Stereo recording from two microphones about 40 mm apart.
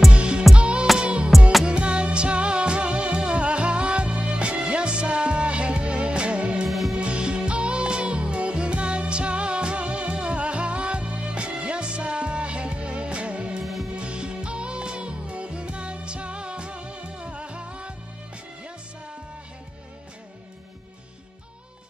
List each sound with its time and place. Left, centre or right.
0.1 s music: right
6.7 s music: centre
7.0 s music: right